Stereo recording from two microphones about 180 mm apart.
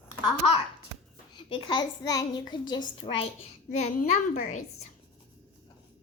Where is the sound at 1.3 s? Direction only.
25° left (ahead or behind).